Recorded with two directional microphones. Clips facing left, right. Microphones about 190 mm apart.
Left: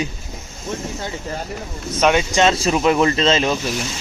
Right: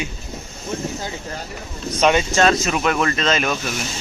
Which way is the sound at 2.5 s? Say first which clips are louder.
Left 4 dB; 30° left (ahead or behind).